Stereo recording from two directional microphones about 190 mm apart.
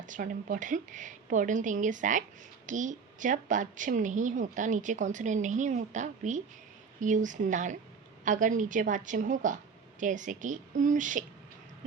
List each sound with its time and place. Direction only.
0.0 s a woman's voice: 45° right (ahead or behind)